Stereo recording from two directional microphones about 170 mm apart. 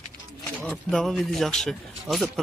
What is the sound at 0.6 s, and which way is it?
Speech, 5° left (ahead or behind).